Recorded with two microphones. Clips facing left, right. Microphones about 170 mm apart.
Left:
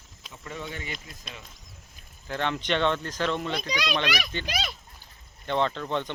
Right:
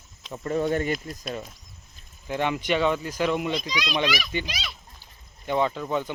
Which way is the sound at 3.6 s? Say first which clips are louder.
Right 2 dB; 55° left (ahead or behind).